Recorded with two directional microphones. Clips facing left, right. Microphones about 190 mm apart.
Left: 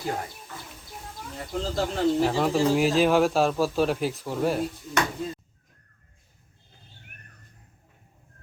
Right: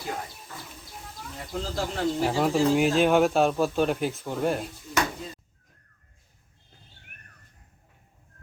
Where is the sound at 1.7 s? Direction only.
Centre (ahead or behind).